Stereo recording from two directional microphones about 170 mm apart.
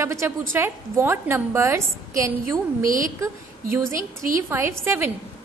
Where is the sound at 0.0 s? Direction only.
15° right (ahead or behind).